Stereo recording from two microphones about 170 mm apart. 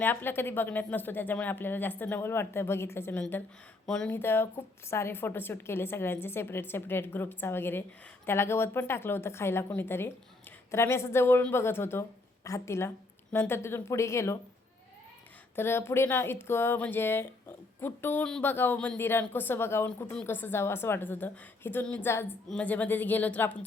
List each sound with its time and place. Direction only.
0.0 s speech: 10° left (ahead or behind)
15.5 s speech: 15° left (ahead or behind)